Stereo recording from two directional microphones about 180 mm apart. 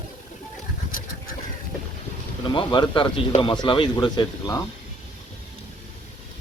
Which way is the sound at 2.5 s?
25° left (ahead or behind).